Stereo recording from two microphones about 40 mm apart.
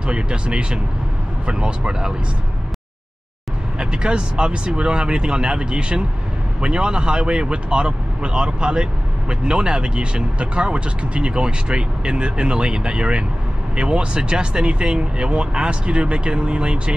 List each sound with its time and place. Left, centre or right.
0.0 s speech: right
3.8 s speech: right